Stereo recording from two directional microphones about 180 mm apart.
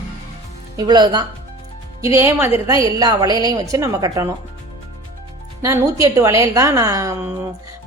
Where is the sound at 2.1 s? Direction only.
15° right (ahead or behind).